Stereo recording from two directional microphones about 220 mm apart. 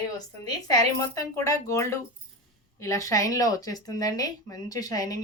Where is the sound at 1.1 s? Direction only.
15° left (ahead or behind).